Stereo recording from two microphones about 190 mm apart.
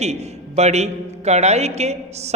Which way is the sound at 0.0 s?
35° right (ahead or behind).